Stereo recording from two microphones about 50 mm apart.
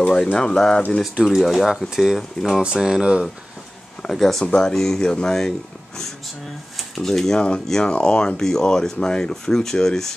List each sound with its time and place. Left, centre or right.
0.1 s speech: centre
1.2 s speech: centre
2.6 s speech: centre
4.0 s speech: centre
7.0 s speech: centre
7.3 s speech: left
8.4 s speech: centre